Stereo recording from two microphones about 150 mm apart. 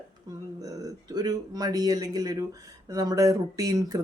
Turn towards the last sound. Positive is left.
turn(degrees=-25)  # may be behind; listen again after turning